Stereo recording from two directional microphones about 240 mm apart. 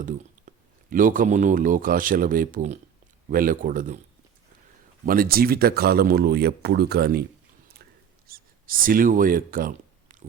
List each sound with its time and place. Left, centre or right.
0.0 s speech: right
5.0 s speech: right
8.3 s speech: right